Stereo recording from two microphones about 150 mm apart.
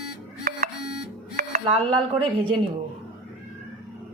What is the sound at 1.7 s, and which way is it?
Speech, 35° right (ahead or behind).